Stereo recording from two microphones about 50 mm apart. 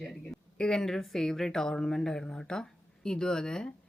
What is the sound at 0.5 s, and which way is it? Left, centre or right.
Speech, centre.